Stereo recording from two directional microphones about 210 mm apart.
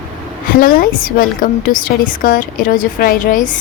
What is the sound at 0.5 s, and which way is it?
A woman's voice, 45° left (ahead or behind).